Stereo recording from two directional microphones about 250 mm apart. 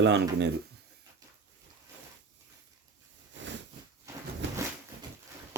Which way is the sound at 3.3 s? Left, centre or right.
Right.